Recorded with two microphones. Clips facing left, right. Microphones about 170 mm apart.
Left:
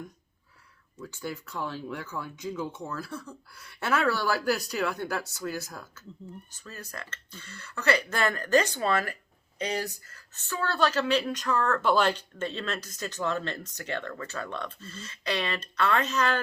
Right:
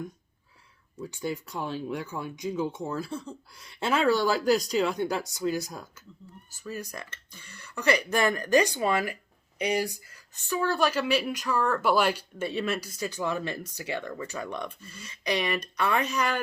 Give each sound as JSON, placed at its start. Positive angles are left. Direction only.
{"t": 0.9, "sound": "speech", "side_deg": -20}